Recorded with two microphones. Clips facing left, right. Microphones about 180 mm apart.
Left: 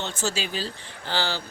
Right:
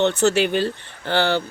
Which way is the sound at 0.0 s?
65° right (ahead or behind).